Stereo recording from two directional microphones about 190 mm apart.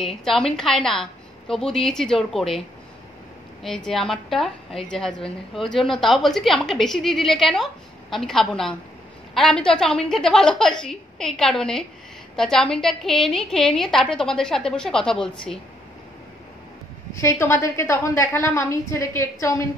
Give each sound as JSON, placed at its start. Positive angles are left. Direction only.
{"t": 0.0, "sound": "a woman's voice", "side_deg": 0}
{"t": 3.6, "sound": "a woman's voice", "side_deg": 5}
{"t": 17.1, "sound": "a woman's voice", "side_deg": 15}